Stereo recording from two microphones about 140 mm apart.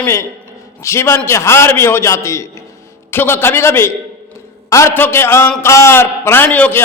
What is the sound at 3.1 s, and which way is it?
A man's voice, 15° left (ahead or behind).